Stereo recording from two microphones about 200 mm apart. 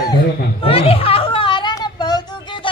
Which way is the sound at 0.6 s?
30° left (ahead or behind).